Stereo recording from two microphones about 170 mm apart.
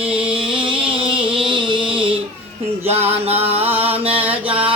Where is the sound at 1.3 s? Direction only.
30° right (ahead or behind).